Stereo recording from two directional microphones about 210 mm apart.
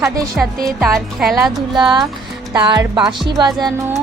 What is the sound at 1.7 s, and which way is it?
Speech, 20° right (ahead or behind).